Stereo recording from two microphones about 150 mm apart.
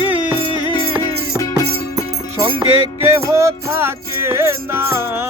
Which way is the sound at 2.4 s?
35° right (ahead or behind).